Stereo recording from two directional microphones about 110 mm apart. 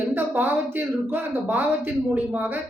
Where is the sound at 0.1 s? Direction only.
20° right (ahead or behind).